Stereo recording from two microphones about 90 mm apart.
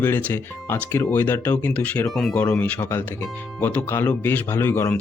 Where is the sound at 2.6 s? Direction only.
20° left (ahead or behind).